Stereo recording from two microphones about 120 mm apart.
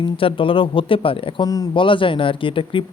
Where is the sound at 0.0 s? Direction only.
45° left (ahead or behind).